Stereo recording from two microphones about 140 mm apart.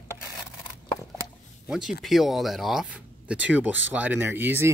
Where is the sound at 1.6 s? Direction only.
5° right (ahead or behind).